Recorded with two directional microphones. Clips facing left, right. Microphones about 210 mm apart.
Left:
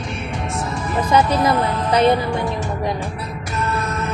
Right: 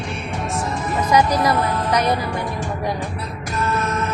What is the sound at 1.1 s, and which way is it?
Speech, 25° left (ahead or behind).